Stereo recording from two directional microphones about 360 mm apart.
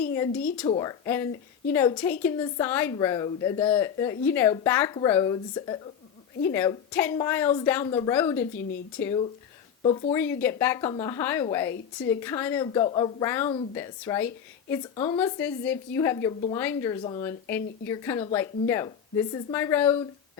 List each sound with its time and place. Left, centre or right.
0.7 s a woman's voice: centre
14.9 s a woman's voice: centre
15.2 s a woman's voice: centre